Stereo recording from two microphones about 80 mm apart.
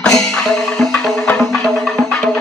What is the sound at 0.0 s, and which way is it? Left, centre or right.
Music, centre.